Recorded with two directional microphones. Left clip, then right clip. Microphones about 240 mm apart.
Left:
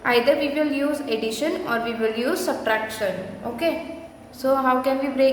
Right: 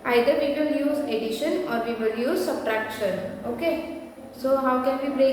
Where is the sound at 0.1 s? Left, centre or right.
Centre.